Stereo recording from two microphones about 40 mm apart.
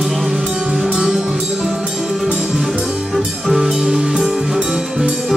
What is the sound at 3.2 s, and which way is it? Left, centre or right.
Music, centre.